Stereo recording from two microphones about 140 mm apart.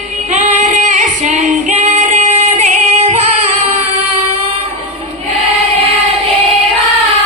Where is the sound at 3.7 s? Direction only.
50° right (ahead or behind).